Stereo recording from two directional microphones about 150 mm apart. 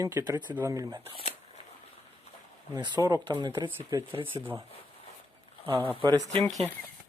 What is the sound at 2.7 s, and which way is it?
Speech, 30° right (ahead or behind).